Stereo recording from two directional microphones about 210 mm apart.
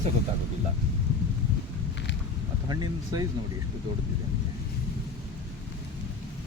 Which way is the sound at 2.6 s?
20° right (ahead or behind).